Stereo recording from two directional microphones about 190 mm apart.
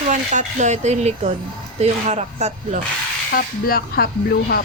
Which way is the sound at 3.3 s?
50° left (ahead or behind).